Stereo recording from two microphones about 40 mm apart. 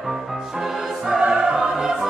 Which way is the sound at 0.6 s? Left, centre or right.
Centre.